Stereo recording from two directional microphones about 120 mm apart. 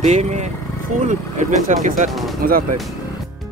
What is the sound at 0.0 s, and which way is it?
Speech, 75° right (ahead or behind).